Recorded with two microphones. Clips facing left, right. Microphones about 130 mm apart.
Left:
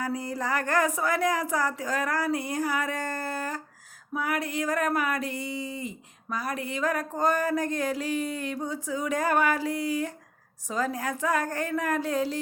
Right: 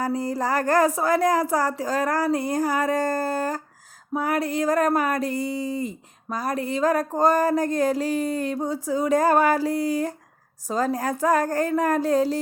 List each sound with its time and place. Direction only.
0.0 s speech: 35° right (ahead or behind)